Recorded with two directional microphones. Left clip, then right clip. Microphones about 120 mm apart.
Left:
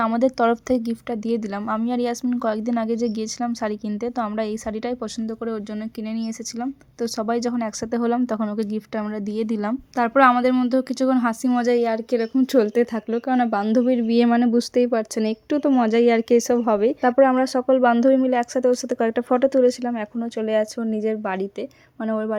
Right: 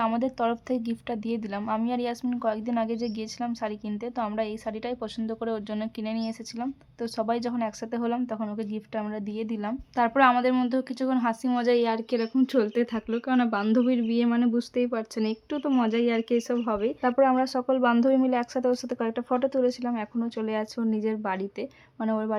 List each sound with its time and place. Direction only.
0.0 s a woman's voice: 45° left (ahead or behind)
6.0 s a woman's voice: 25° left (ahead or behind); by 9.7 s 55° left (ahead or behind)
9.9 s a woman's voice: 40° left (ahead or behind)
10.3 s speech: 25° left (ahead or behind)
10.7 s a woman's voice: 40° left (ahead or behind)
11.5 s a woman's voice: 25° left (ahead or behind)
14.3 s a woman's voice: 50° left (ahead or behind)
19.9 s a woman's voice: 30° left (ahead or behind)